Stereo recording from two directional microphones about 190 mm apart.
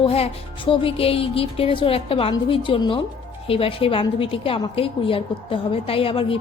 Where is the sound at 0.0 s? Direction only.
30° left (ahead or behind).